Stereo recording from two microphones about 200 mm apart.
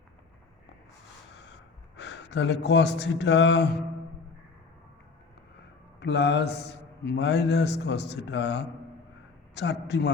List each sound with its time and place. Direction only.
2.0 s speech: 60° left (ahead or behind)
6.0 s a man's voice: 60° left (ahead or behind)